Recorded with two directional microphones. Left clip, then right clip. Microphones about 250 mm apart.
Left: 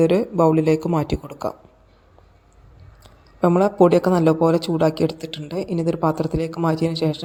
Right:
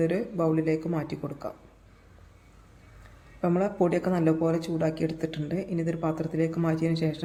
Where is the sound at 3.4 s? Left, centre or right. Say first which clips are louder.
Left 10 dB; left.